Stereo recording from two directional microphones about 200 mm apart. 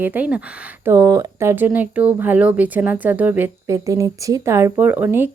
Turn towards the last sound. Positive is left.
turn(degrees=-10)  # may be behind; listen again after turning